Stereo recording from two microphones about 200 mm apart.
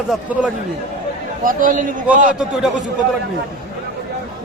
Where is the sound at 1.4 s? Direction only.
45° right (ahead or behind).